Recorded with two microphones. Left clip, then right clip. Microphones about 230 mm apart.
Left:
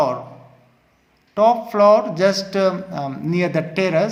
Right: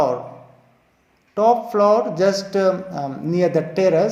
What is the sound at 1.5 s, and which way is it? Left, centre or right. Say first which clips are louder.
Speech: left 2 dB; left.